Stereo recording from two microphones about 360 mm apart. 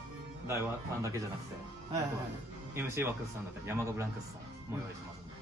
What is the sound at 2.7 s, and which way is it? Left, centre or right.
Speech, centre.